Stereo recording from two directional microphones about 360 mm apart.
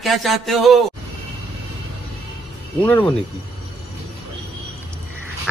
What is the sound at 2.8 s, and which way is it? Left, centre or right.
Speech, centre.